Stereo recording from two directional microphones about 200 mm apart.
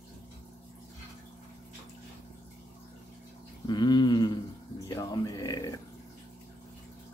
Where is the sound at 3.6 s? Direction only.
20° left (ahead or behind).